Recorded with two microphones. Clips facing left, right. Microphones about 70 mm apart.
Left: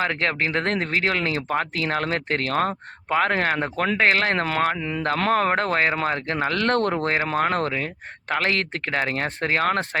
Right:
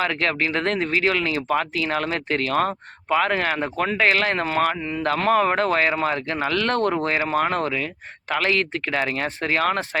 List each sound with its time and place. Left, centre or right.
0.0 s speech: left
4.8 s speech: left
5.3 s speech: left